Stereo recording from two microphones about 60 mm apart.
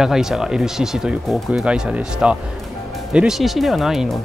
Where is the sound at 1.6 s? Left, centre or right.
Centre.